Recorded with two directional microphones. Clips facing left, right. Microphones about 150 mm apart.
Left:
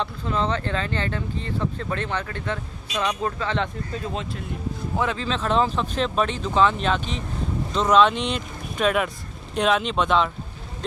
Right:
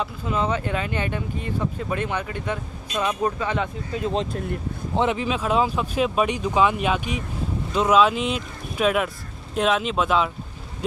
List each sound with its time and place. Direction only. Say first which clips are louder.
0.0 s speech: even; 10° right (ahead or behind)
2.9 s speech: right 1 dB; 5° right (ahead or behind)
3.2 s speech: right 1 dB; 15° right (ahead or behind)
4.1 s speech: right 5 dB; 35° right (ahead or behind)
4.9 s speech: right 4 dB; 20° right (ahead or behind)